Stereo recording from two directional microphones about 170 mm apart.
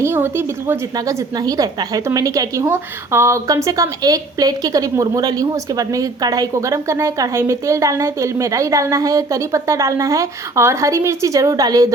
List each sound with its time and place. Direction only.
0.0 s a woman's voice: 15° right (ahead or behind)